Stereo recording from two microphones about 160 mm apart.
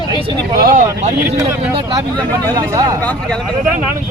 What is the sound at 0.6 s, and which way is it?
Speech, 60° right (ahead or behind).